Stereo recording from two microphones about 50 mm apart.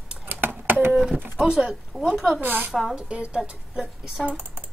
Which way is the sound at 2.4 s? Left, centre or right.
Right.